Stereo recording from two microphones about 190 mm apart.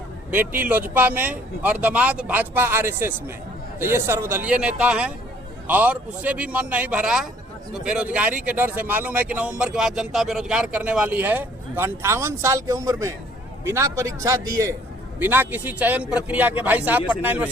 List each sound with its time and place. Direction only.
0.3 s speech: 10° right (ahead or behind)